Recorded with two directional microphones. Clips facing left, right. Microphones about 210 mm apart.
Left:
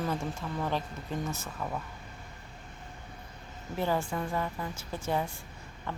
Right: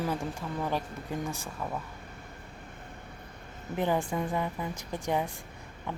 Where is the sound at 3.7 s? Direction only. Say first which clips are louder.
Right 2 dB; 20° right (ahead or behind).